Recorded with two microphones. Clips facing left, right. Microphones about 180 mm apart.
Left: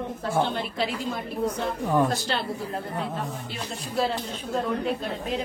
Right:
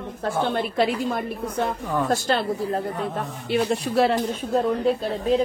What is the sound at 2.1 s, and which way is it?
Speech, 45° right (ahead or behind).